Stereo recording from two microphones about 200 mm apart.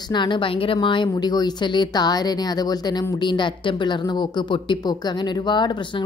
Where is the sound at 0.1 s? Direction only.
25° left (ahead or behind).